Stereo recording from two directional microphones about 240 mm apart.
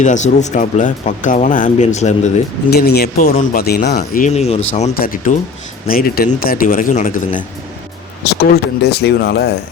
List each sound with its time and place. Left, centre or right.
0.0 s speech: left
2.6 s speech: left